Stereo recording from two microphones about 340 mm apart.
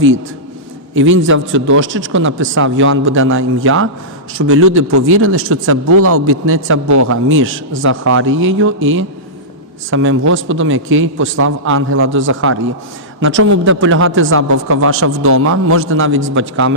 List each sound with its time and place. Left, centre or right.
0.9 s a man's voice: right
6.8 s speech: right
7.1 s a man's voice: right